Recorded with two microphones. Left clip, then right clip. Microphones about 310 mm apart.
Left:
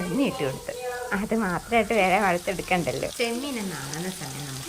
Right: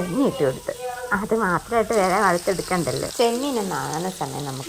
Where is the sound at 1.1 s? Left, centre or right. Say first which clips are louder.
Right 7 dB; right.